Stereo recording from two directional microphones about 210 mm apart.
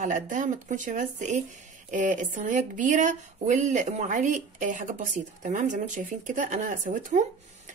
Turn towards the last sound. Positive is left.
turn(degrees=-35)  # may be behind; listen again after turning